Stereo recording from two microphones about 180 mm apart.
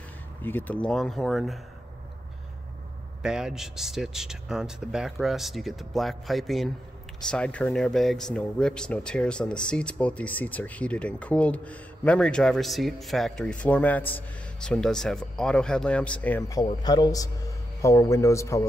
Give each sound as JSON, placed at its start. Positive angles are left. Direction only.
{"t": 0.4, "sound": "speech", "side_deg": 10}
{"t": 3.2, "sound": "a man's voice", "side_deg": -5}